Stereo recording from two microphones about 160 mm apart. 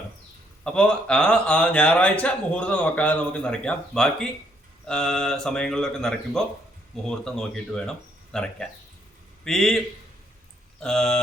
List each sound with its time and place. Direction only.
0.6 s a man's voice: 5° left (ahead or behind)